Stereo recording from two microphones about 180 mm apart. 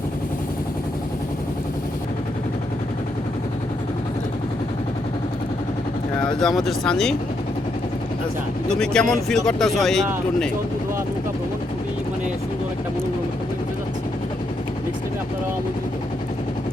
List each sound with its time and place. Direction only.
6.4 s speech: centre (ahead or behind)
8.8 s speech: 5° left (ahead or behind)